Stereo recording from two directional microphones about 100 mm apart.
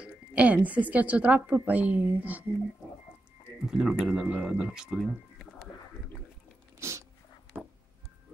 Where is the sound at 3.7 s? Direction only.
5° right (ahead or behind).